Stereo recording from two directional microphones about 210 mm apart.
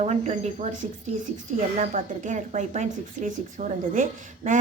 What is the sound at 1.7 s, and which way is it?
A woman's voice, 35° right (ahead or behind).